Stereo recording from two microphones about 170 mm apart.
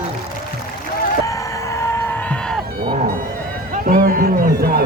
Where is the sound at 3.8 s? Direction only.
55° right (ahead or behind).